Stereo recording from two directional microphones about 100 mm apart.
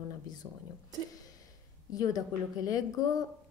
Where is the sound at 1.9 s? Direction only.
40° left (ahead or behind).